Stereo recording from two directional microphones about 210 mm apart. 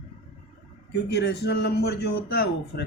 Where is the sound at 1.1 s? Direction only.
55° left (ahead or behind).